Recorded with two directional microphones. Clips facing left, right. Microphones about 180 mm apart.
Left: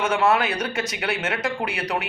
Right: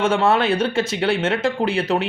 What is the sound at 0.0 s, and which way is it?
Speech, 30° right (ahead or behind).